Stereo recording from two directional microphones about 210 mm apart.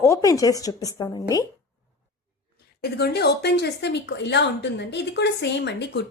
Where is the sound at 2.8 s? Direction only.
50° left (ahead or behind).